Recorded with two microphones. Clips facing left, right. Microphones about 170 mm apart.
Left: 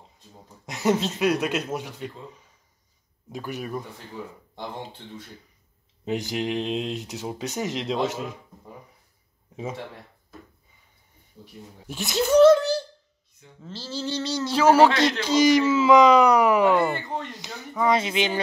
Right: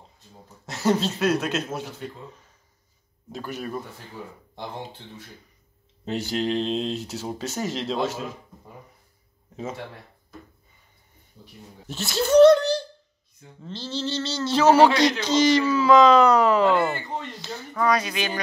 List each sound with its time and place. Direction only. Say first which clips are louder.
0.3 s speech: even; 15° left (ahead or behind)
3.3 s speech: even; 15° left (ahead or behind)
6.0 s speech: right 1 dB; 15° left (ahead or behind)
11.9 s speech: even; 15° left (ahead or behind)
12.4 s a sound: right 1 dB; 5° left (ahead or behind)
13.6 s speech: right 2 dB; 5° left (ahead or behind); by 18.4 s 25° left (ahead or behind)